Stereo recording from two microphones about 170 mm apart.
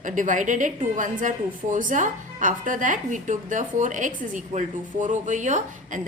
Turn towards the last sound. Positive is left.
turn(degrees=-45)  # may be behind; listen again after turning